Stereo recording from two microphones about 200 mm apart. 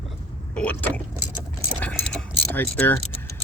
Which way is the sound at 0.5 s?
5° left (ahead or behind).